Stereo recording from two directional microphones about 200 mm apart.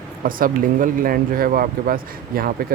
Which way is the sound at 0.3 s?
45° right (ahead or behind).